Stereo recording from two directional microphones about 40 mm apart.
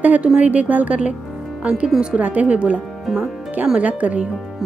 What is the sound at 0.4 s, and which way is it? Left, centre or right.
Speech, right.